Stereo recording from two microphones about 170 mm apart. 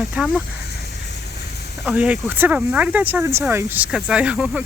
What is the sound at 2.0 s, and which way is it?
A woman's voice, 10° right (ahead or behind).